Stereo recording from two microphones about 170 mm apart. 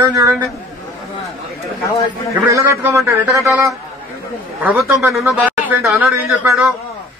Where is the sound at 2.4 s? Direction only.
15° right (ahead or behind); by 6.7 s centre (ahead or behind).